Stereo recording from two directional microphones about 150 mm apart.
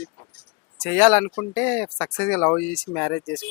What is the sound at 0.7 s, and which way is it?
Speech, 5° left (ahead or behind).